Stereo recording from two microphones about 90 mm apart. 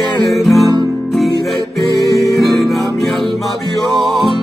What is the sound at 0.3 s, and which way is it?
Music, centre (ahead or behind).